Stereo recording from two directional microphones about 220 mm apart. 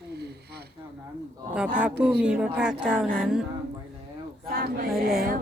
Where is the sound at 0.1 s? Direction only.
50° right (ahead or behind).